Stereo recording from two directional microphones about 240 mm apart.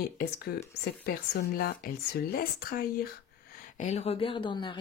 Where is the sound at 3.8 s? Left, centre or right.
Left.